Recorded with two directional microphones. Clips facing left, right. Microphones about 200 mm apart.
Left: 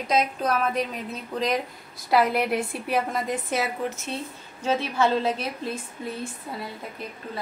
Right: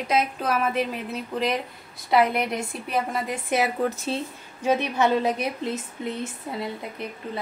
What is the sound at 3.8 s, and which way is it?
Speech, 35° right (ahead or behind).